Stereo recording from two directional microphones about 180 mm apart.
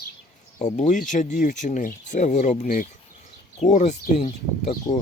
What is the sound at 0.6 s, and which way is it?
Speech, 45° left (ahead or behind).